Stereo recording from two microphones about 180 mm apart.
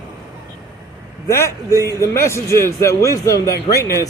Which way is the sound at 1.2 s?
15° left (ahead or behind).